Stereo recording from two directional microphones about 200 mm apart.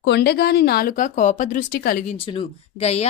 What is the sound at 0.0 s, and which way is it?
Speech, 55° left (ahead or behind).